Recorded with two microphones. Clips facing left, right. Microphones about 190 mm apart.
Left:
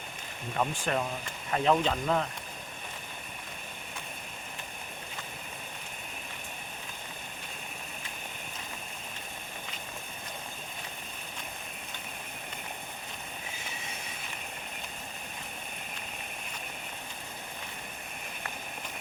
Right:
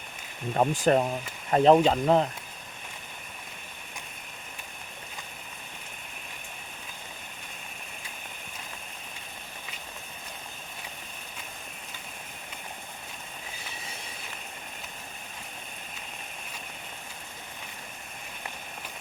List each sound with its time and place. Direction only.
0.5 s speech: 35° right (ahead or behind)